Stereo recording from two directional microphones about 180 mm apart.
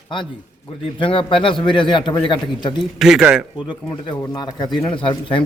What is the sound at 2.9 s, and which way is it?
Speech, centre (ahead or behind).